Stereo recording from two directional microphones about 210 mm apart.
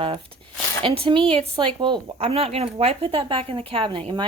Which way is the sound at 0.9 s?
25° right (ahead or behind).